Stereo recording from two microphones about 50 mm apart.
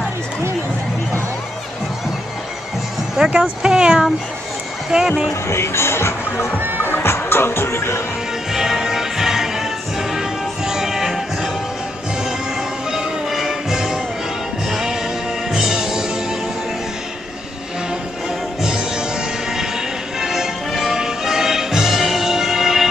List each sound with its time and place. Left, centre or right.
3.3 s speech: centre
5.3 s speech: left
6.6 s music: right
6.9 s music: left
8.5 s music: centre
18.6 s music: centre